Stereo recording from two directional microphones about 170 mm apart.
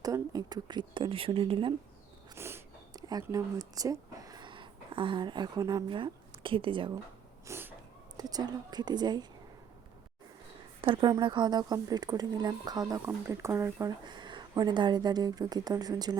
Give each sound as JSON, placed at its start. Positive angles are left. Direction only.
{"t": 0.0, "sound": "speech", "side_deg": -20}
{"t": 2.3, "sound": "speech", "side_deg": -15}
{"t": 7.4, "sound": "sneeze", "side_deg": -15}
{"t": 8.1, "sound": "speech", "side_deg": -20}
{"t": 10.8, "sound": "speech", "side_deg": -30}